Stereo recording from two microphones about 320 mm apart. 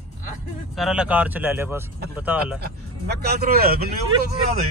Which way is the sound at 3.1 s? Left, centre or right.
Right.